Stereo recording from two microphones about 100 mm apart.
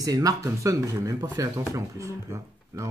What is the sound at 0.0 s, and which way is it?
Speech, 35° right (ahead or behind).